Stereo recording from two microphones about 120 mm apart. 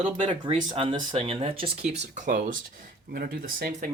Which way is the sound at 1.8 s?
80° right.